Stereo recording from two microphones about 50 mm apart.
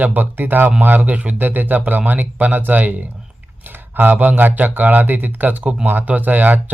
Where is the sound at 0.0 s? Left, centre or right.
Right.